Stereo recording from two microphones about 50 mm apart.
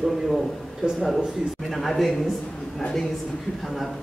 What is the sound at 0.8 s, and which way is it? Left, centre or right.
Speech, centre.